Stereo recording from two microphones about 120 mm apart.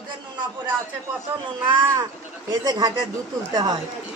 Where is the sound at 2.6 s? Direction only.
35° right (ahead or behind).